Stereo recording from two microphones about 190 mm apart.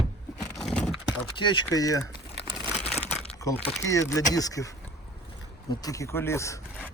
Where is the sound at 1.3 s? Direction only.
25° left (ahead or behind).